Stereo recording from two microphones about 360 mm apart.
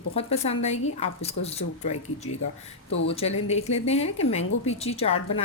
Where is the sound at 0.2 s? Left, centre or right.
Centre.